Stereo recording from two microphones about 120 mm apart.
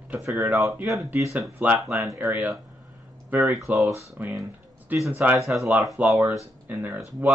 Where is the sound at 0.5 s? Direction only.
25° right (ahead or behind).